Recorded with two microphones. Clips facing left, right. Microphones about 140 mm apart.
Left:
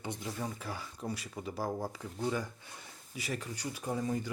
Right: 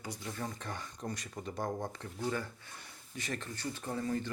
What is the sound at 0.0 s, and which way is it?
Speech, 25° left (ahead or behind).